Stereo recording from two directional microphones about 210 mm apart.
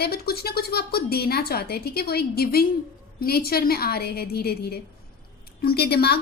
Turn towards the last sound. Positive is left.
turn(degrees=50)  # may be behind; listen again after turning